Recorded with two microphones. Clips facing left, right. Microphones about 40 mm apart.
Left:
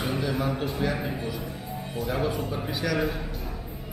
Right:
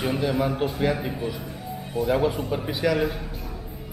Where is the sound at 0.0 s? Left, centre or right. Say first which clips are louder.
Right 4 dB; centre.